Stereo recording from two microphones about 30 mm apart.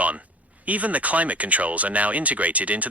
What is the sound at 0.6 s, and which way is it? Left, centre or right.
Speech, right.